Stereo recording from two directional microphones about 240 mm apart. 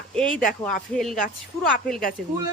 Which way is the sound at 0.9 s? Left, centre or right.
Centre.